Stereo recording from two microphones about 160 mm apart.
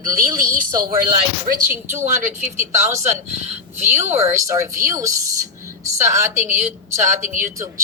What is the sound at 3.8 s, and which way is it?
A woman's voice, 15° right (ahead or behind).